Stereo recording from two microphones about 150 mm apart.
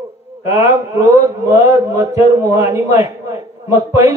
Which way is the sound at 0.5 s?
20° right (ahead or behind).